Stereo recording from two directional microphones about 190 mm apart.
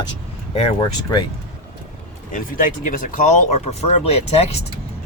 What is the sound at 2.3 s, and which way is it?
Speech, 45° left (ahead or behind).